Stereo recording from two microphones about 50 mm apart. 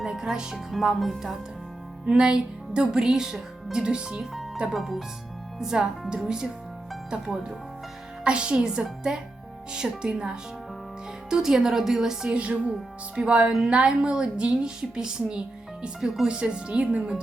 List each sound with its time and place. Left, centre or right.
0.0 s speech: centre
2.0 s speech: centre
4.7 s speech: centre
5.5 s speech: centre
8.2 s speech: centre
12.3 s a woman's voice: right